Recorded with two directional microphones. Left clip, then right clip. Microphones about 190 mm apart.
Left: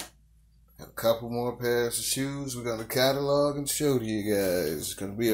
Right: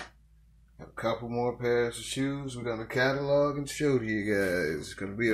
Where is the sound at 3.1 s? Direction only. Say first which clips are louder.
Left 1 dB; 30° left (ahead or behind).